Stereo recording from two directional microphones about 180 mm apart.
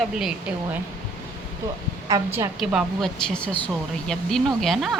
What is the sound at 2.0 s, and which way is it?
Speech, 20° right (ahead or behind).